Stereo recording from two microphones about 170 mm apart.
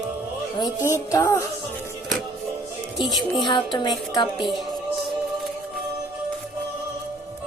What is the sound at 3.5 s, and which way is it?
Speech, 30° left (ahead or behind).